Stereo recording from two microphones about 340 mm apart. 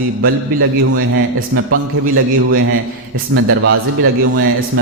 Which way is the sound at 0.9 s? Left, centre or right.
Right.